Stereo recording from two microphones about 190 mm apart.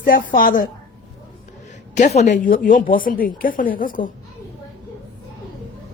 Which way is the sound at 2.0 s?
35° left (ahead or behind).